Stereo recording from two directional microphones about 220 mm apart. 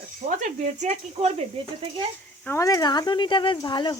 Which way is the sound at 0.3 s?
35° right (ahead or behind).